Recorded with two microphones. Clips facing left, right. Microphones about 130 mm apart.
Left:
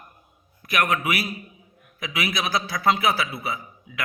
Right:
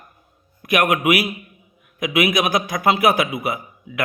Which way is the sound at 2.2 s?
55° right (ahead or behind).